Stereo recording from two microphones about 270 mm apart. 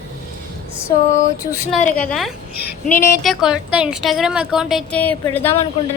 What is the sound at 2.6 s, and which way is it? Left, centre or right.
Speech, left.